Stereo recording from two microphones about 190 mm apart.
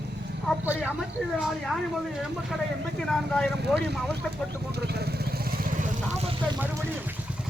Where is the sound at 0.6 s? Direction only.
5° right (ahead or behind).